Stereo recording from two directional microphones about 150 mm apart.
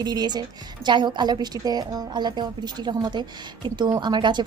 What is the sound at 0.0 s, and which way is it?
Speech, 25° right (ahead or behind).